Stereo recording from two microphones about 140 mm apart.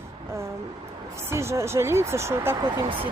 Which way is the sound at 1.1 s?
20° right (ahead or behind).